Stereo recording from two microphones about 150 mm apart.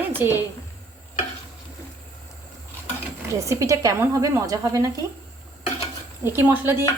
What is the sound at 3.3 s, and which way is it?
A woman's voice, 20° right (ahead or behind).